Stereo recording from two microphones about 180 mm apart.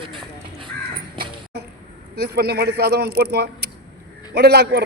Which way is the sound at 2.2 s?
60° right (ahead or behind).